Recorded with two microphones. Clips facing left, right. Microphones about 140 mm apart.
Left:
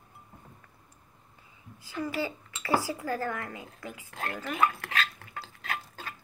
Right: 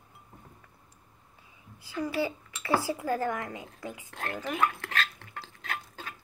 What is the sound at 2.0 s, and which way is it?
A child's voice, 20° right (ahead or behind).